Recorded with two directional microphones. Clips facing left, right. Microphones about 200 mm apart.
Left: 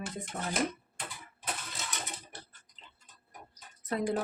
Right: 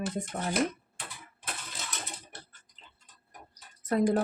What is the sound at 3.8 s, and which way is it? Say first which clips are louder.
Speech: right 6 dB; 45° right (ahead or behind).